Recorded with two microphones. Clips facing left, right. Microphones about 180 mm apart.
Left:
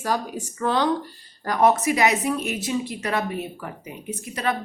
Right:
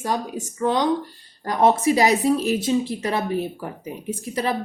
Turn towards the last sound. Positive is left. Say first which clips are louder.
# right 2 dB
turn(degrees=-30)  # may be behind; listen again after turning